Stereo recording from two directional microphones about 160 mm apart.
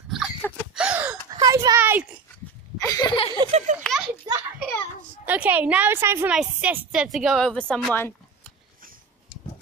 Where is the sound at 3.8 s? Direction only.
Centre (ahead or behind).